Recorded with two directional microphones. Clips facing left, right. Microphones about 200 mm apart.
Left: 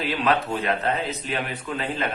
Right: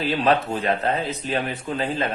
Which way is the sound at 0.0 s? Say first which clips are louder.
Right 3 dB; 30° right (ahead or behind).